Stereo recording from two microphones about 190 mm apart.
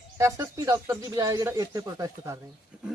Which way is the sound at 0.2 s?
15° right (ahead or behind).